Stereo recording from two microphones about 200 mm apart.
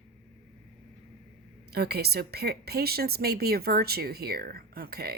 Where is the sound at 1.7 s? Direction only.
55° right (ahead or behind).